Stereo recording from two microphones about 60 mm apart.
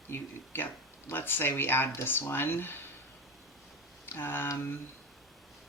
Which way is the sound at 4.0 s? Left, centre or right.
Left.